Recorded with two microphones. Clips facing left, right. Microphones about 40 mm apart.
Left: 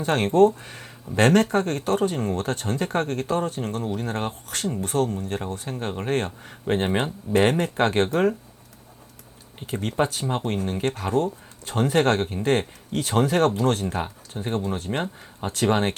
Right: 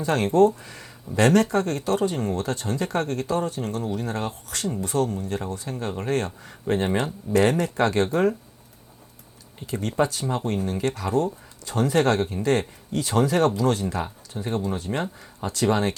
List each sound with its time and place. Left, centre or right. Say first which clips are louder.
0.0 s speech: left 1 dB; left
9.7 s speech: even; left